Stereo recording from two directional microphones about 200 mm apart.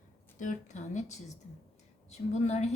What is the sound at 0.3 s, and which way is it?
A woman's voice, 40° left (ahead or behind).